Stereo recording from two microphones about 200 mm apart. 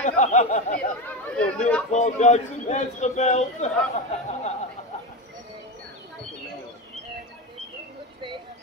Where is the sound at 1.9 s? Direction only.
35° left (ahead or behind).